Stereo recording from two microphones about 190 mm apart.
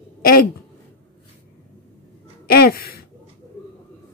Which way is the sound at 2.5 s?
50° left (ahead or behind).